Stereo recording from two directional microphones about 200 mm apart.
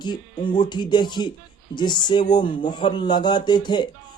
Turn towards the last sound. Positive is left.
turn(degrees=20)  # may be behind; listen again after turning